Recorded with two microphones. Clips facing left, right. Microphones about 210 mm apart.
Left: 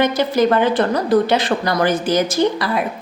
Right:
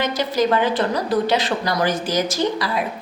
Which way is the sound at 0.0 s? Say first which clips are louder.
Left 4 dB; 55° left (ahead or behind).